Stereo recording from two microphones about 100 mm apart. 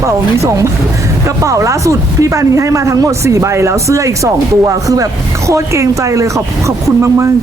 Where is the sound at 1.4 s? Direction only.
30° right (ahead or behind).